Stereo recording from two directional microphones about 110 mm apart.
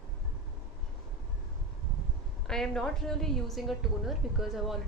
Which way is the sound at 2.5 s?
5° left (ahead or behind).